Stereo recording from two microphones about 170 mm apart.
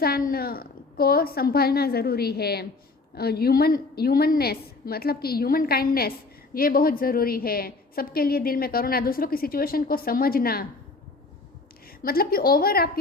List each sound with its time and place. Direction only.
0.0 s a woman's voice: 60° left (ahead or behind)
12.0 s a woman's voice: 60° left (ahead or behind)